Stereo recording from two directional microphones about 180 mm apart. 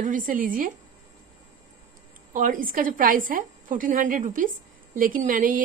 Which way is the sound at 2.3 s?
50° right (ahead or behind).